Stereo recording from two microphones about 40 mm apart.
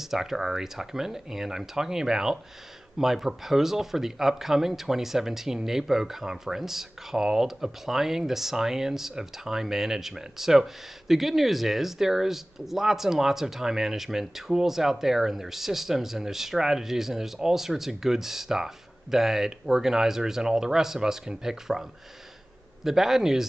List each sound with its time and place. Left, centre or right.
0.0 s speech: centre
22.8 s speech: centre